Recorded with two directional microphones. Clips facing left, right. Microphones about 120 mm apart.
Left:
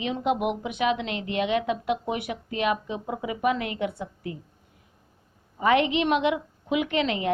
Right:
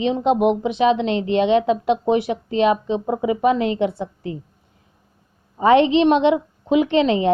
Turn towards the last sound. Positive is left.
turn(degrees=-30)  # may be behind; listen again after turning